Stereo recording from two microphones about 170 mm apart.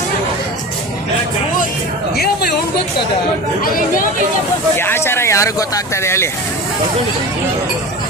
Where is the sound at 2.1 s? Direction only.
70° left (ahead or behind).